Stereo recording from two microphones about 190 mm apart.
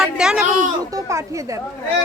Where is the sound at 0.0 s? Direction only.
5° right (ahead or behind).